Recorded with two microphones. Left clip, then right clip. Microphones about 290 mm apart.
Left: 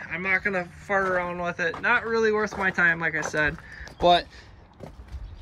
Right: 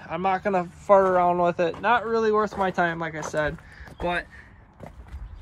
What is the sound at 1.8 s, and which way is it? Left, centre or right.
Speech, centre.